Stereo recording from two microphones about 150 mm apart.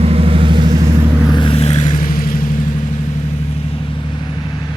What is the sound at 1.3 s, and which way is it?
Vehicle, 35° left (ahead or behind).